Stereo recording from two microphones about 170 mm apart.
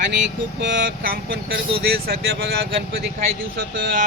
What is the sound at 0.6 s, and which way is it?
Speech, 90° right.